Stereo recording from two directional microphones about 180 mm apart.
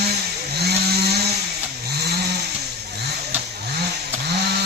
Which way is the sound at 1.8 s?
65° right (ahead or behind).